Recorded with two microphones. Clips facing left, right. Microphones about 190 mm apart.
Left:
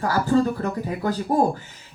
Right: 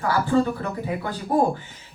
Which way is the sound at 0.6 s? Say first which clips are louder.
Left 2 dB; 40° left (ahead or behind).